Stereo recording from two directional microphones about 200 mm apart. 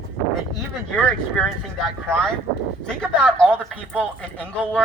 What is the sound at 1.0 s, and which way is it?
Speech, 5° left (ahead or behind).